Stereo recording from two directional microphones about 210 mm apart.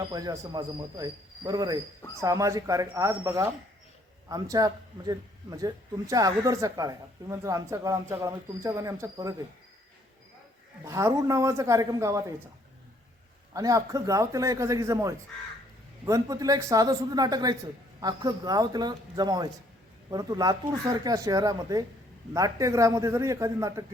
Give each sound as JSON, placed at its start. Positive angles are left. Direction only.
{"t": 0.0, "sound": "a man's voice", "side_deg": -20}
{"t": 10.8, "sound": "a man's voice", "side_deg": -15}
{"t": 13.5, "sound": "a man's voice", "side_deg": -15}